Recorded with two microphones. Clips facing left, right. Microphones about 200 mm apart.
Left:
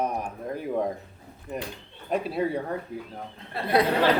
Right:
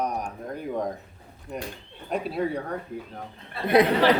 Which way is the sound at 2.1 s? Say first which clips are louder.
Left 1 dB; centre (ahead or behind).